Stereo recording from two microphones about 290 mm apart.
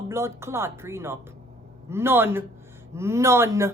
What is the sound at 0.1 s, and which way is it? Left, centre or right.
Speech, centre.